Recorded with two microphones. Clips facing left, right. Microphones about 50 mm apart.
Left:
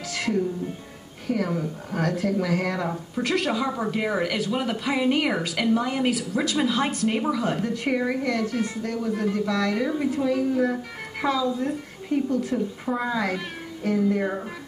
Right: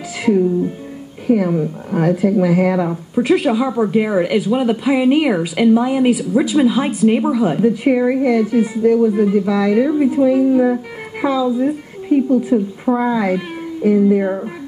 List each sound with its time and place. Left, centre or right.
1.2 s a woman's voice: centre